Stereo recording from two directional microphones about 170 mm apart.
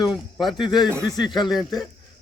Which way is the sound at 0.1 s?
Centre (ahead or behind).